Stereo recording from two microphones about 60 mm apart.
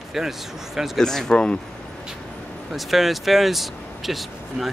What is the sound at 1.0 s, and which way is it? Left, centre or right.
Speech, centre.